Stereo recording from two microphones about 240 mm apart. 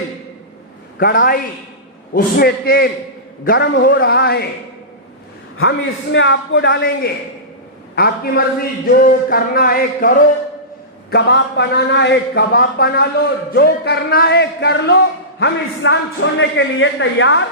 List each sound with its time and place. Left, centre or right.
0.9 s music: left
5.5 s a man's voice: left
7.9 s music: left
11.1 s a man's voice: left